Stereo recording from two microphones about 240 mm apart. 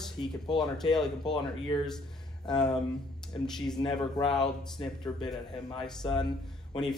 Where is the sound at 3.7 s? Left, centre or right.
Centre.